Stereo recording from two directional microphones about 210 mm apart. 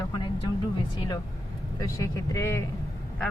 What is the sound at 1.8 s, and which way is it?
Speech, 15° left (ahead or behind).